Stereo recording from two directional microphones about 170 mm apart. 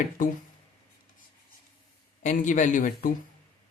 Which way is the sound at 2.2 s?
45° left (ahead or behind).